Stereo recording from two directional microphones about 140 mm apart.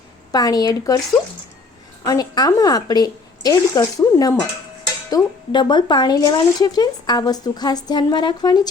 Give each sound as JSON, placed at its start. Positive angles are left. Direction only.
{"t": 0.3, "sound": "speech", "side_deg": 25}
{"t": 2.0, "sound": "speech", "side_deg": 30}